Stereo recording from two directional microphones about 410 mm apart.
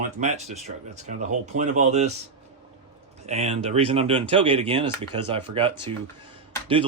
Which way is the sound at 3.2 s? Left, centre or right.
Centre.